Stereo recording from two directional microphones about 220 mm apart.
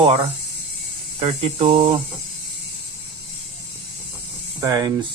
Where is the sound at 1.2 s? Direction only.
30° right (ahead or behind).